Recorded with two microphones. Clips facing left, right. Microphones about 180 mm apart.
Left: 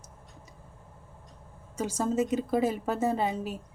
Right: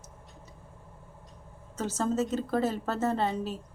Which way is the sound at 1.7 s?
10° left (ahead or behind).